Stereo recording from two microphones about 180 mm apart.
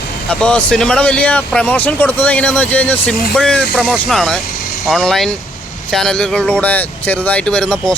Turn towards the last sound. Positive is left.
turn(degrees=5)  # may be behind; listen again after turning